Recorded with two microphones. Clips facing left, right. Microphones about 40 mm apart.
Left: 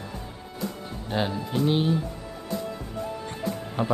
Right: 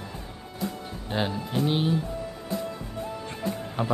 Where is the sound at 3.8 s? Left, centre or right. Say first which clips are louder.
Left 2 dB; centre.